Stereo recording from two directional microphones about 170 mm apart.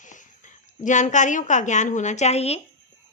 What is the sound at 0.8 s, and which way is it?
A woman's voice, 45° left (ahead or behind).